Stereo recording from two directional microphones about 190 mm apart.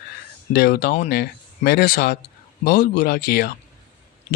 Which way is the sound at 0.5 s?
55° left (ahead or behind).